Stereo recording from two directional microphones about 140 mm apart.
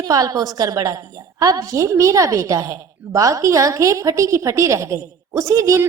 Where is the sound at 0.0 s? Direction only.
25° right (ahead or behind).